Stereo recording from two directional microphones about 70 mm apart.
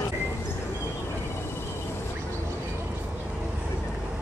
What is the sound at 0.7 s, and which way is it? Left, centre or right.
Vehicle, left.